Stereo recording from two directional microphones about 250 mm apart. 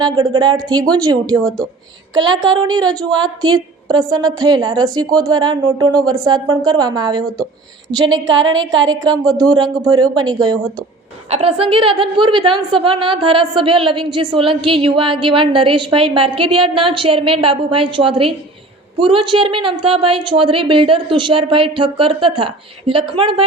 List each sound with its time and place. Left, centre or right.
0.0 s a woman's voice: centre
2.4 s a woman's voice: centre